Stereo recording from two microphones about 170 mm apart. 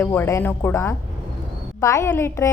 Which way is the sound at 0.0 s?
15° left (ahead or behind).